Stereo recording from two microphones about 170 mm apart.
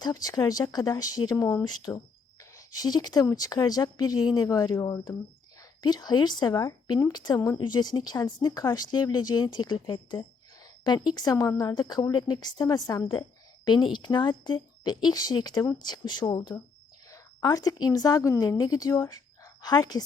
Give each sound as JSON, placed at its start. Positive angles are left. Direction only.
{"t": 0.0, "sound": "a woman's voice", "side_deg": 20}